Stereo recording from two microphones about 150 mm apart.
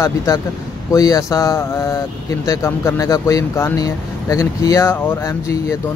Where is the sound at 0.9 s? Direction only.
25° left (ahead or behind).